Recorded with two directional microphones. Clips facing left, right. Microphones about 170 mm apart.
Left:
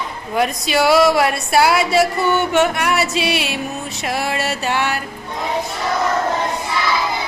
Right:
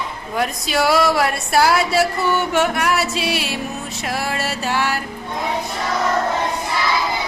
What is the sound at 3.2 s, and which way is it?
Music, 65° left (ahead or behind).